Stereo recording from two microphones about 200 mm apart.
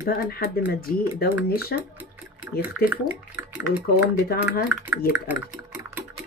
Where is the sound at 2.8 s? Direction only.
5° right (ahead or behind).